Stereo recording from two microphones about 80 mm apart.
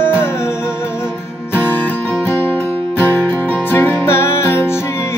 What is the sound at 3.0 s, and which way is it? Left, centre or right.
Music, left.